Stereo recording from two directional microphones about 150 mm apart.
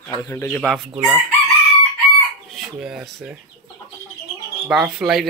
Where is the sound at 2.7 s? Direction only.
5° right (ahead or behind).